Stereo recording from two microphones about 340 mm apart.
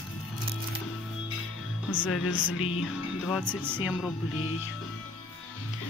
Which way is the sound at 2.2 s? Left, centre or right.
Left.